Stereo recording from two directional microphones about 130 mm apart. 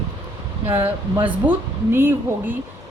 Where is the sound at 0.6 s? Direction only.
15° right (ahead or behind).